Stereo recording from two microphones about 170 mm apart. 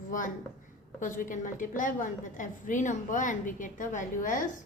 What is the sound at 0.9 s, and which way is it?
A woman's voice, 50° left (ahead or behind).